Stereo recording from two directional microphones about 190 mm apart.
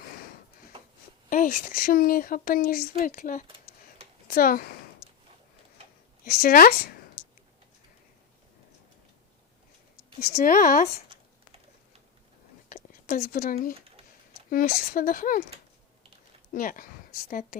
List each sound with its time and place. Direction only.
1.3 s speech: 45° left (ahead or behind)
5.0 s a sound: 35° left (ahead or behind)
6.2 s speech: 50° left (ahead or behind)
7.2 s tick-tock: 40° left (ahead or behind)
10.3 s speech: 45° left (ahead or behind)
12.6 s a sound: 45° left (ahead or behind)
14.5 s speech: 45° left (ahead or behind)
16.6 s speech: 45° left (ahead or behind)